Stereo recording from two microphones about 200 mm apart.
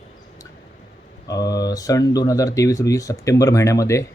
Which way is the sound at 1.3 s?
20° left (ahead or behind).